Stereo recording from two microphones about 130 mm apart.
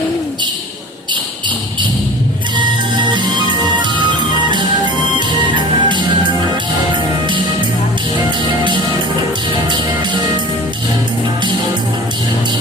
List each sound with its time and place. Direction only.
3.1 s music: 35° right (ahead or behind)